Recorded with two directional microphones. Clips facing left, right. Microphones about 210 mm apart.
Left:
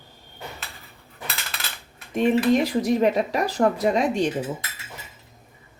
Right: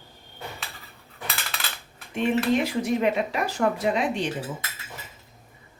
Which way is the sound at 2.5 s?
35° left (ahead or behind).